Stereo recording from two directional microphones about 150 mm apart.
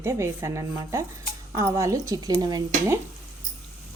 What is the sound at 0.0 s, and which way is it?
A woman's voice, 20° right (ahead or behind).